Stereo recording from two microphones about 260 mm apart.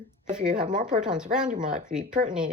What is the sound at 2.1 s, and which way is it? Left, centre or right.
Speech, right.